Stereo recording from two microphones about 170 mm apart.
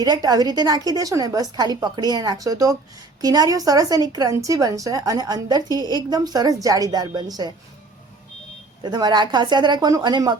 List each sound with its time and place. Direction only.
0.0 s a woman's voice: 25° right (ahead or behind)
8.8 s a woman's voice: 25° right (ahead or behind)